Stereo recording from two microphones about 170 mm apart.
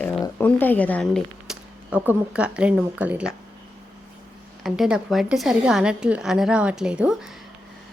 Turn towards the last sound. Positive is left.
turn(degrees=-5)  # may be behind; listen again after turning